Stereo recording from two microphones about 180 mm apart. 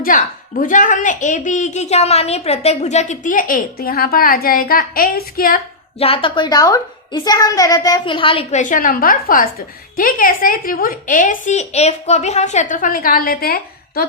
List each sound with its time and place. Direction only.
0.0 s a woman's voice: 50° left (ahead or behind)
6.0 s a woman's voice: 30° left (ahead or behind); by 14.1 s 55° left (ahead or behind)